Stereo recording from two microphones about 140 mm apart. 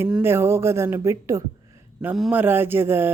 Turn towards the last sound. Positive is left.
turn(degrees=-15)  # may be behind; listen again after turning